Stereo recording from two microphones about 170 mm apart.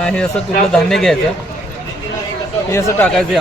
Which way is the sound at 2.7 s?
20° left (ahead or behind).